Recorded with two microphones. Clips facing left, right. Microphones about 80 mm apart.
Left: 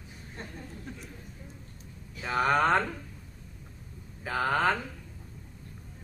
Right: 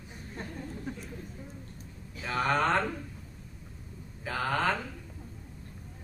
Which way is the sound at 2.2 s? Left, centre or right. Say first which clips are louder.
Left 3 dB; centre.